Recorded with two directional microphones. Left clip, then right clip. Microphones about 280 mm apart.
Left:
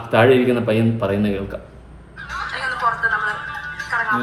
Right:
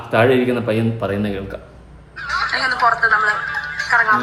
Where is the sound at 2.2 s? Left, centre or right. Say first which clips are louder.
Right 6 dB; right.